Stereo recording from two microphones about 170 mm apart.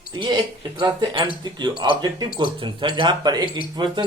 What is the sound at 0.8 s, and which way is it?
Speech, 30° right (ahead or behind).